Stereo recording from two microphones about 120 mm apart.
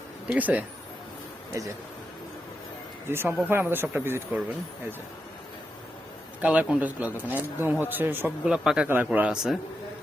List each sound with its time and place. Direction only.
0.3 s speech: 15° right (ahead or behind)
3.1 s speech: 20° right (ahead or behind)
6.4 s speech: 10° right (ahead or behind)
8.4 s a man's voice: 5° right (ahead or behind)